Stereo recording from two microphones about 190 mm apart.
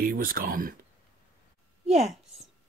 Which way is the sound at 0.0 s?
50° right (ahead or behind).